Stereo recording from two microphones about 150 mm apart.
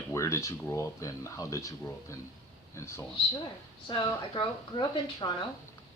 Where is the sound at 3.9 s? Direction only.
30° left (ahead or behind).